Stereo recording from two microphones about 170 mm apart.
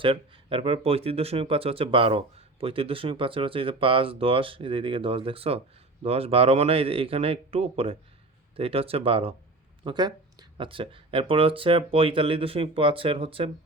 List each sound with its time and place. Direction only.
0.0 s speech: 30° right (ahead or behind)